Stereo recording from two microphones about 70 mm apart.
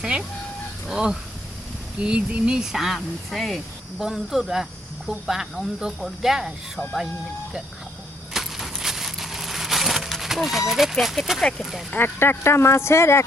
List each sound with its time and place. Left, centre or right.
0.9 s speech: centre
8.3 s crushing: centre
10.7 s speech: centre
11.9 s speech: left